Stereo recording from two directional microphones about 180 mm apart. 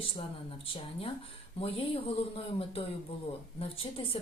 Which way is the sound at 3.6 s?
30° left (ahead or behind).